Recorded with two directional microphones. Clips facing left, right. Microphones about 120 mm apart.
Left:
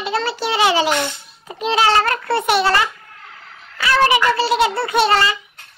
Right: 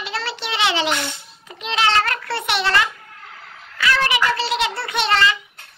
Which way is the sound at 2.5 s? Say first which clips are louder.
Left 3 dB; 30° left (ahead or behind).